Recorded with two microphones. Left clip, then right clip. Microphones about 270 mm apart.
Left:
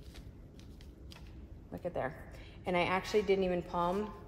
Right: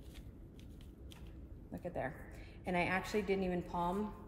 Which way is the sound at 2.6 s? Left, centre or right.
Left.